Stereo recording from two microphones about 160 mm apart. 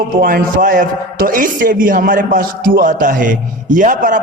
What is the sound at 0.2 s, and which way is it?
Speech, 60° right (ahead or behind).